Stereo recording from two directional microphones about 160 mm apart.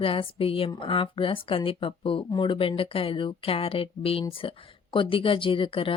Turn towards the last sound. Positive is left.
turn(degrees=35)  # may be behind; listen again after turning